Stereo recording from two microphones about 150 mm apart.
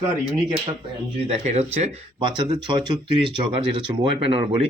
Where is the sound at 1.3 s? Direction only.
45° right (ahead or behind).